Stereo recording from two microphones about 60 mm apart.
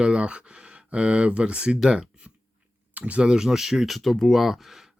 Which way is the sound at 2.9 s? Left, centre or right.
Right.